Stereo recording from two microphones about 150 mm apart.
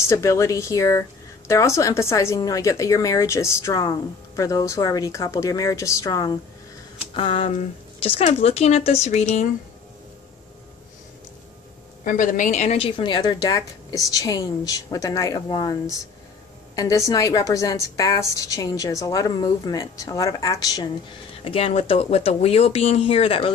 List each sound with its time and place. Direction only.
0.0 s a woman's voice: 20° left (ahead or behind)
7.2 s speech: 35° left (ahead or behind)
12.0 s a woman's voice: 65° left (ahead or behind); by 20.9 s 25° left (ahead or behind)
21.5 s speech: 40° left (ahead or behind)